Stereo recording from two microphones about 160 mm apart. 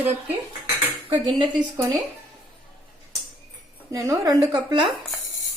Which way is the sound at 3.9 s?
20° right (ahead or behind).